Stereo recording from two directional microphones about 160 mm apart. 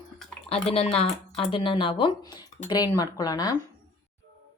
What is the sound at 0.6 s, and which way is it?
Speech, 35° left (ahead or behind).